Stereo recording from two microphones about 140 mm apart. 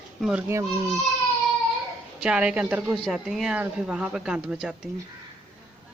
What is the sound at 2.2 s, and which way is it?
Speech, 5° right (ahead or behind).